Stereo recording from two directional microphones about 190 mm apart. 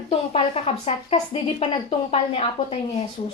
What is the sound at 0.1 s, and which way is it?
A woman's voice, 30° left (ahead or behind).